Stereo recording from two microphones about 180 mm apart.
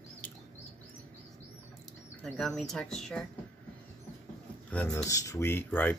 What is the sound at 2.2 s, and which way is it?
Speech, 5° left (ahead or behind).